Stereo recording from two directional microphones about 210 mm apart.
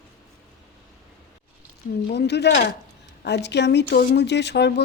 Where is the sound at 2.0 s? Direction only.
55° left (ahead or behind).